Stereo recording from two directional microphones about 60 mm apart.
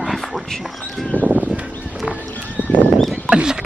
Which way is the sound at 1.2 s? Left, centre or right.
Right.